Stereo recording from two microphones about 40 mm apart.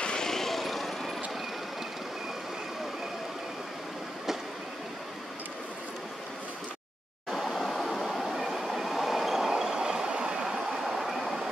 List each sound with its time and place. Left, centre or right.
0.0 s vehicle: left
0.3 s vehicle: centre
7.2 s train: centre